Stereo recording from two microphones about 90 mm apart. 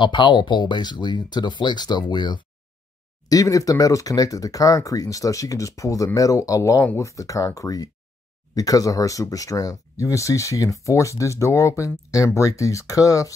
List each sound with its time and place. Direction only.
0.0 s speech: 60° left (ahead or behind)
3.3 s speech: 40° left (ahead or behind)